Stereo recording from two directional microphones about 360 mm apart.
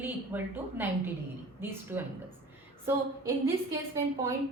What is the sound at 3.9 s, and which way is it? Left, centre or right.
Speech, centre.